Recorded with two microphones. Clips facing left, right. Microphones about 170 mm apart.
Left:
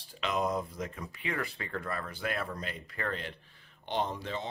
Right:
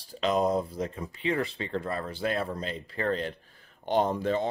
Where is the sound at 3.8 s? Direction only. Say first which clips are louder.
Right 8 dB; 45° right (ahead or behind).